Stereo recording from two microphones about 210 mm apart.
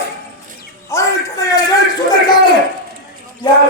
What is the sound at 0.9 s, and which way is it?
Speech, 15° left (ahead or behind).